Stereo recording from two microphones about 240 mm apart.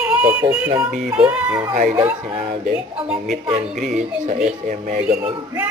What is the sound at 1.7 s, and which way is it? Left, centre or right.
Speech, right.